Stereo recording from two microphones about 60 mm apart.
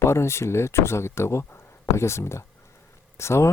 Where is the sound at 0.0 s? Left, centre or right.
Left.